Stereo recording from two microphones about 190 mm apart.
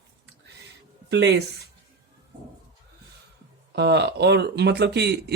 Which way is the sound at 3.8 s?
65° right (ahead or behind).